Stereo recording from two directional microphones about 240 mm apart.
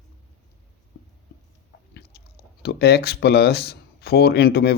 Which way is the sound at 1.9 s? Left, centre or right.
Left.